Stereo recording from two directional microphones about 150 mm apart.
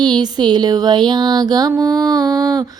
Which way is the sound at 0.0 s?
30° right (ahead or behind).